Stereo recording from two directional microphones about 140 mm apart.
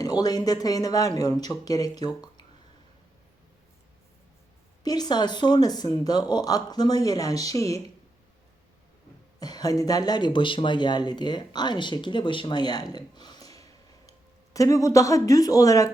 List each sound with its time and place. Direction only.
0.0 s speech: 30° left (ahead or behind)
4.8 s speech: 30° left (ahead or behind)
9.4 s speech: 30° left (ahead or behind)